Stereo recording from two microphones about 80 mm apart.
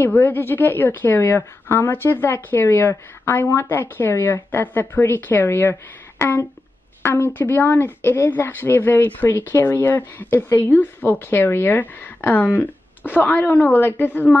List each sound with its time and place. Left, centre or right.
0.0 s a woman's voice: left